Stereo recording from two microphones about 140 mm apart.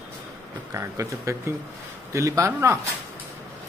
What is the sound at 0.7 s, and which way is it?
Speech, 20° right (ahead or behind).